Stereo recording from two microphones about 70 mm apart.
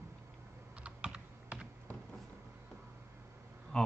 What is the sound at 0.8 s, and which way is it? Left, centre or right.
Computer keyboard, centre.